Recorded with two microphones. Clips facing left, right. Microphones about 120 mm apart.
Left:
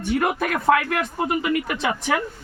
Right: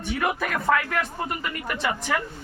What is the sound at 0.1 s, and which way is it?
Speech, 50° left (ahead or behind).